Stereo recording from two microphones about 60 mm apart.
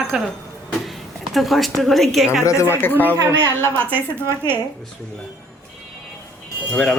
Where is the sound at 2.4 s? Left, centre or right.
Left.